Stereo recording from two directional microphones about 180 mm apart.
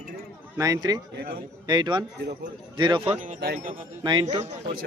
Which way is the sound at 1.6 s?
25° right (ahead or behind).